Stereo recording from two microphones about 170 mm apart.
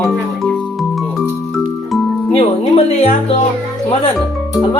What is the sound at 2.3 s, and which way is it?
Speech, 35° left (ahead or behind).